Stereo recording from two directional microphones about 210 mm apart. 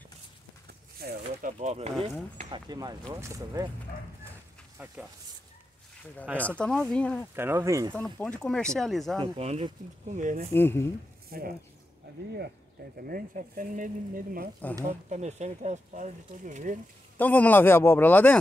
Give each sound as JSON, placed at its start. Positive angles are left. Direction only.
{"t": 0.9, "sound": "speech", "side_deg": -45}
{"t": 1.6, "sound": "speech", "side_deg": -30}
{"t": 2.5, "sound": "speech", "side_deg": -20}
{"t": 6.3, "sound": "speech", "side_deg": 5}
{"t": 7.3, "sound": "speech", "side_deg": -10}
{"t": 7.9, "sound": "speech", "side_deg": 5}
{"t": 9.2, "sound": "speech", "side_deg": -30}
{"t": 10.5, "sound": "a man's voice", "side_deg": 10}
{"t": 11.3, "sound": "speech", "side_deg": -45}
{"t": 13.0, "sound": "speech", "side_deg": -40}
{"t": 17.2, "sound": "a man's voice", "side_deg": 5}